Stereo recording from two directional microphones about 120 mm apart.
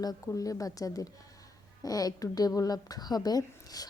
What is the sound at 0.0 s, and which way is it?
A woman's voice, 30° left (ahead or behind).